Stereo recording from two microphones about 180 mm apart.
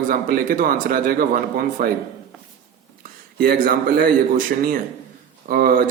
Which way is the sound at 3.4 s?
50° right (ahead or behind).